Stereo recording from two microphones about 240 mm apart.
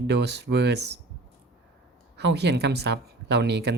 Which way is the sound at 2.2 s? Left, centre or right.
Right.